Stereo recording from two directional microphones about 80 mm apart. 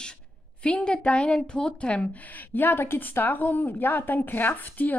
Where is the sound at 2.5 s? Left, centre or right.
Left.